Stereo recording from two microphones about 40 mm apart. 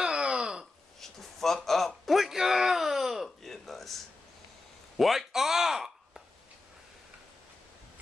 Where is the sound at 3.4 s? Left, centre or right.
Centre.